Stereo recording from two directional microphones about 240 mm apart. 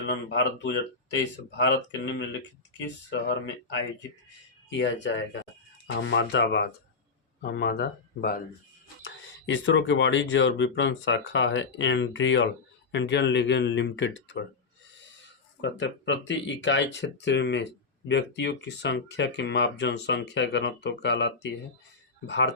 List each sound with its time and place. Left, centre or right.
0.0 s speech: left
4.8 s speech: left
15.6 s speech: left